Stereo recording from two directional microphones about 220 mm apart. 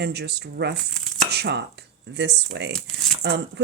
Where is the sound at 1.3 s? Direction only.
50° right (ahead or behind).